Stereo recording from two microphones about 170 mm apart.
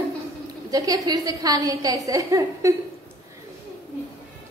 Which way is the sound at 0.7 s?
20° right (ahead or behind).